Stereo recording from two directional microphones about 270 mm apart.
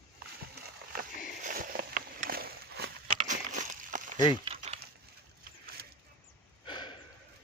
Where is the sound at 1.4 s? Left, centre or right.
Right.